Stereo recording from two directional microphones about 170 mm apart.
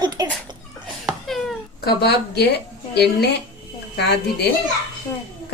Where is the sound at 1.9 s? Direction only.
75° left (ahead or behind).